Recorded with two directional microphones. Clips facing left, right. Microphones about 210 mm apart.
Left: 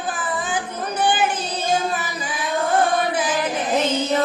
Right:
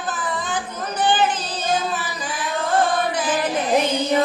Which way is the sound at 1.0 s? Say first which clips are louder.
Right 1 dB; 10° left (ahead or behind).